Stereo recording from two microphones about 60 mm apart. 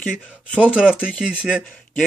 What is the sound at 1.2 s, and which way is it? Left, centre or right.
Speech, centre.